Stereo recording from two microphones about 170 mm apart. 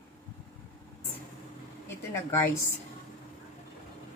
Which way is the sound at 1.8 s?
15° left (ahead or behind).